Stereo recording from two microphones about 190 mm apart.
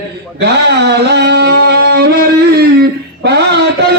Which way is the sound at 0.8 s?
60° right (ahead or behind).